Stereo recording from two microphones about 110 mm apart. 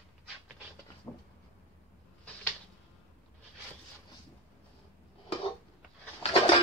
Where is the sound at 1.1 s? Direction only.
30° left (ahead or behind).